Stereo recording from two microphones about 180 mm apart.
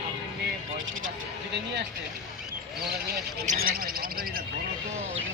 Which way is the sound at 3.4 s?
50° right (ahead or behind).